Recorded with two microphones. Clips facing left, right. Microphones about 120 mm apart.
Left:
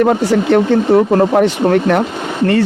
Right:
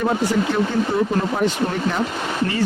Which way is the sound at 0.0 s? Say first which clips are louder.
Left 7 dB; 70° left (ahead or behind).